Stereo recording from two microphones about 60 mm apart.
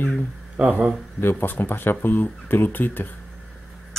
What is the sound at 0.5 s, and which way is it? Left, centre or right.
Speech, right.